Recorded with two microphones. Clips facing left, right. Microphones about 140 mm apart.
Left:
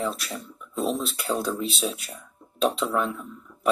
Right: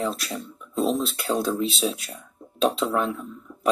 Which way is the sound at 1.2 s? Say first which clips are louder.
Right 1 dB; 35° right (ahead or behind).